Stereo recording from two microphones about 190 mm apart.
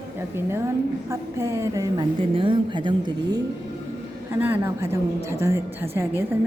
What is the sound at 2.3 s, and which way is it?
A woman's voice, 25° right (ahead or behind).